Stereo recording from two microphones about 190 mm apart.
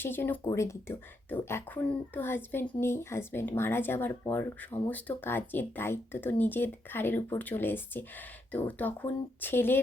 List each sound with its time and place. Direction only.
0.0 s speech: 10° left (ahead or behind)